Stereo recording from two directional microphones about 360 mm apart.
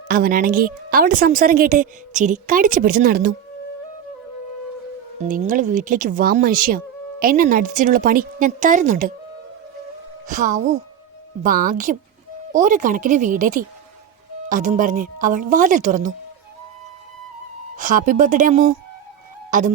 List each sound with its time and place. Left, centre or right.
0.1 s speech: right
5.3 s speech: right
10.2 s speech: right
17.7 s speech: right
19.5 s music: right